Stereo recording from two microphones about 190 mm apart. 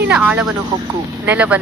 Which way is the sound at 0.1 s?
5° right (ahead or behind).